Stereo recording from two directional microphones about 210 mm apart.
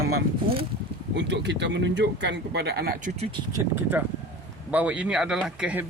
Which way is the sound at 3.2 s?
20° right (ahead or behind).